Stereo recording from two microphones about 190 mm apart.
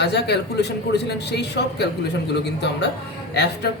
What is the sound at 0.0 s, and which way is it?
Speech, 60° left (ahead or behind).